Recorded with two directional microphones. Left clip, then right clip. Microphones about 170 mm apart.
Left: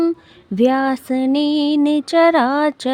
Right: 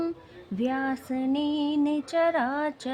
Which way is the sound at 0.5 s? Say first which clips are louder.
Left 13 dB; 45° left (ahead or behind).